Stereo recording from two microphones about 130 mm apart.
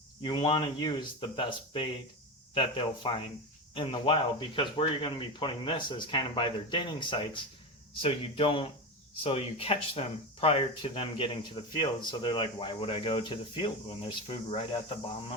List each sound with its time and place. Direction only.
0.2 s speech: 40° left (ahead or behind)